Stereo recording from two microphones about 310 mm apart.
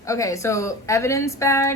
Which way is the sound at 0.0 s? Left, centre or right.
Centre.